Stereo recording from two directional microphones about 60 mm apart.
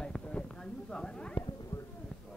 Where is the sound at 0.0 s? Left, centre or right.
Centre.